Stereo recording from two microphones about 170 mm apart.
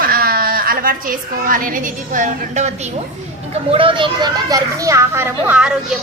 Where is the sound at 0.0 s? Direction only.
60° right (ahead or behind).